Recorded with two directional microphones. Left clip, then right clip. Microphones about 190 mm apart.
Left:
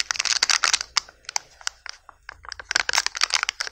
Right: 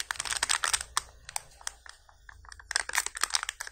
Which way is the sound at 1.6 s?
25° left (ahead or behind).